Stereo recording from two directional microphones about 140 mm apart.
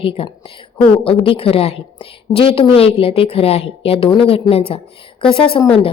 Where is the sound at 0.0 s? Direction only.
40° left (ahead or behind).